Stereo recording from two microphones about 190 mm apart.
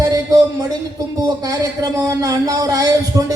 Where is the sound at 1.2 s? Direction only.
20° right (ahead or behind).